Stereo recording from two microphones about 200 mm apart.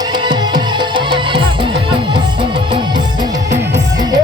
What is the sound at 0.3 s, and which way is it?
Music, 25° right (ahead or behind).